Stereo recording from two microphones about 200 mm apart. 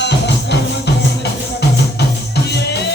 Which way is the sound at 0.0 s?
60° left (ahead or behind).